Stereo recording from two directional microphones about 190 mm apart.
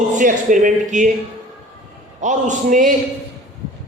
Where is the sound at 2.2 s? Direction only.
40° right (ahead or behind).